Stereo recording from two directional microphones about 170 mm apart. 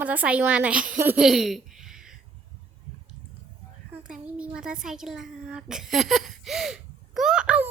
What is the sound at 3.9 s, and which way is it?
A child's voice, 5° right (ahead or behind).